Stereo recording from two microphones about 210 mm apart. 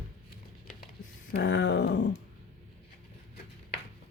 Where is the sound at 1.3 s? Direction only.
55° left (ahead or behind).